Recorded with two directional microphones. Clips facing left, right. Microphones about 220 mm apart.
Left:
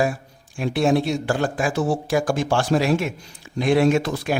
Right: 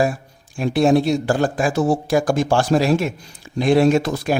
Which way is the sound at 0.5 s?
35° right (ahead or behind).